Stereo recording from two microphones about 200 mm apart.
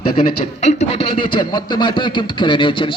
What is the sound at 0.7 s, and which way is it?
A man's voice, 30° left (ahead or behind).